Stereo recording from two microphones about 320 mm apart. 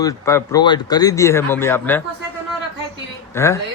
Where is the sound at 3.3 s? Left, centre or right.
Centre.